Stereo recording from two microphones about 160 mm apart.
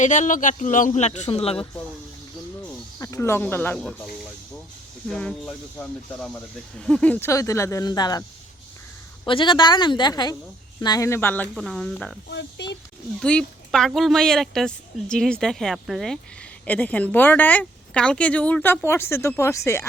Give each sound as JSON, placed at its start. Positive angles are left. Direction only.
{"t": 0.0, "sound": "speech", "side_deg": 50}
{"t": 3.0, "sound": "speech", "side_deg": 20}
{"t": 9.2, "sound": "speech", "side_deg": 30}
{"t": 11.5, "sound": "speech", "side_deg": 0}
{"t": 12.3, "sound": "a child's voice", "side_deg": 90}
{"t": 13.1, "sound": "speech", "side_deg": 5}